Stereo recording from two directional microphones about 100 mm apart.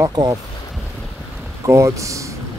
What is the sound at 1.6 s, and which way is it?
Speech, 30° right (ahead or behind).